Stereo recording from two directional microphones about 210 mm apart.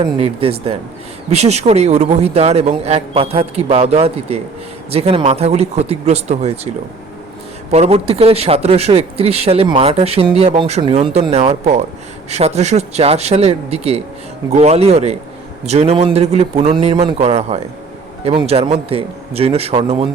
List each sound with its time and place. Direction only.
0.0 s speech: 25° right (ahead or behind)
7.7 s speech: 30° right (ahead or behind)